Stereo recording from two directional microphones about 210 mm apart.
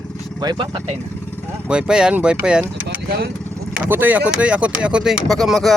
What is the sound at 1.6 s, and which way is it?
Speech, 5° right (ahead or behind).